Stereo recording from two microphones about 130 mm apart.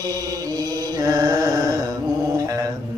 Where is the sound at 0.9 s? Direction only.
25° right (ahead or behind).